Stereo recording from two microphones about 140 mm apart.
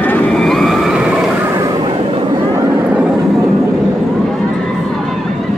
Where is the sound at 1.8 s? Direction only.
35° right (ahead or behind).